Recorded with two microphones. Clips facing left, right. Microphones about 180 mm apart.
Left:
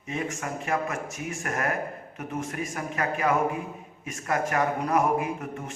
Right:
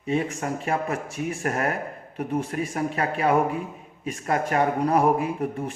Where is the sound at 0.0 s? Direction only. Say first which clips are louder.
Right 6 dB; 30° right (ahead or behind).